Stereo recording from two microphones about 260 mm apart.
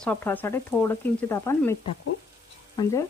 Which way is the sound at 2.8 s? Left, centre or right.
Centre.